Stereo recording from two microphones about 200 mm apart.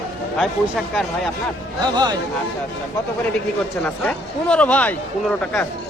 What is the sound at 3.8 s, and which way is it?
Speech, 5° left (ahead or behind).